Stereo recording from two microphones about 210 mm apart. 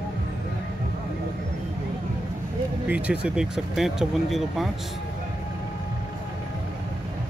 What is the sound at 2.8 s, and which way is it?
Speech, 5° right (ahead or behind).